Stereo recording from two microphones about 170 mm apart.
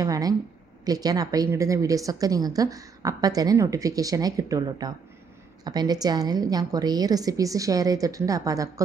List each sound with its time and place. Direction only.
0.0 s a woman's voice: 20° right (ahead or behind)